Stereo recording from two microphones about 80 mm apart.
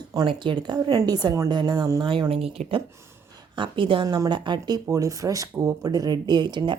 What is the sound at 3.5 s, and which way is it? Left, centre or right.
Speech, right.